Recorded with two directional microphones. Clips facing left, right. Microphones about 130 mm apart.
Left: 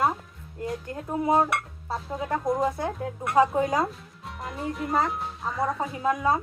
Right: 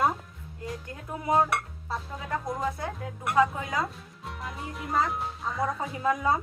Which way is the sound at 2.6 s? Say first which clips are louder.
Left 5 dB; 25° left (ahead or behind).